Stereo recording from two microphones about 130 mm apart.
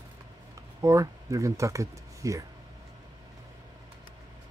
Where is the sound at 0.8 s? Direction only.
25° right (ahead or behind).